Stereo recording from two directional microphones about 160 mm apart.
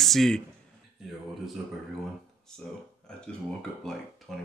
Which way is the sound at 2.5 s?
5° left (ahead or behind).